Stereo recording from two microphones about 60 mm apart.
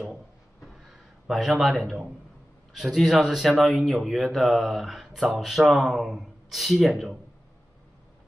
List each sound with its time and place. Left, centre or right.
1.2 s a man's voice: centre